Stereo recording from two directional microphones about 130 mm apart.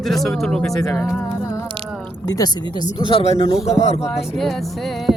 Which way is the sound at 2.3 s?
30° left (ahead or behind).